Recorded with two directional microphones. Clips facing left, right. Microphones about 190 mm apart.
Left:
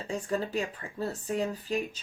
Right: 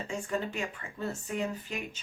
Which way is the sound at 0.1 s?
35° left (ahead or behind).